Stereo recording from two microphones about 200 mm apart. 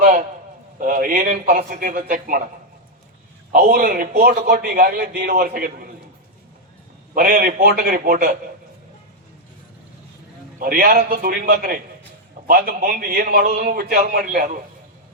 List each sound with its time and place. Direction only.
0.0 s a sound: 45° right (ahead or behind)
0.8 s a man's voice: 45° right (ahead or behind)
3.5 s a man's voice: 45° right (ahead or behind)
7.1 s a man's voice: 45° right (ahead or behind)
10.6 s a man's voice: 45° right (ahead or behind)